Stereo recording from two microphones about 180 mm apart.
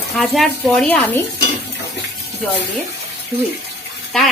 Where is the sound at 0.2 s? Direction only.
Centre (ahead or behind).